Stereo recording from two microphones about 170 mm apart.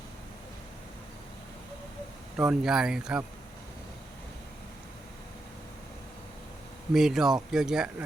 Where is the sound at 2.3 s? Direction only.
5° right (ahead or behind).